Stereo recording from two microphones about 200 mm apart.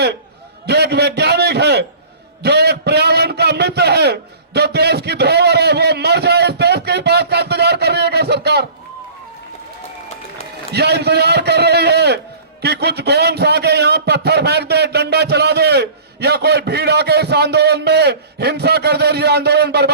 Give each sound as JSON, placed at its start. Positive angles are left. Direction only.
{"t": 0.7, "sound": "a man's voice", "side_deg": -55}
{"t": 2.4, "sound": "a sound", "side_deg": -55}
{"t": 10.7, "sound": "a man's voice", "side_deg": -55}